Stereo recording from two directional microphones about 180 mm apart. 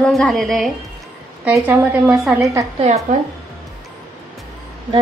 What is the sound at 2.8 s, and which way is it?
Speech, 40° right (ahead or behind).